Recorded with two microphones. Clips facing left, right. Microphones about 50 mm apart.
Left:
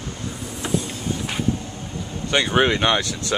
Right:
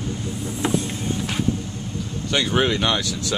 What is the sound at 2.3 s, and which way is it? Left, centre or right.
Speech, centre.